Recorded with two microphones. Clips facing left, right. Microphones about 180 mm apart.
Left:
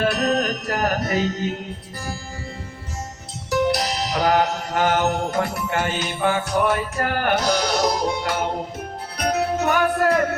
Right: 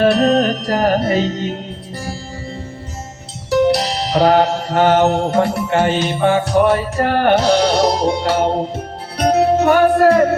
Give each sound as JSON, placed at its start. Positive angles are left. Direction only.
{"t": 0.1, "sound": "music", "side_deg": -30}
{"t": 3.5, "sound": "music", "side_deg": -30}